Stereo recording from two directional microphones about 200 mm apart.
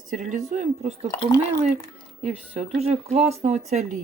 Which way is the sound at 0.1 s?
40° right (ahead or behind).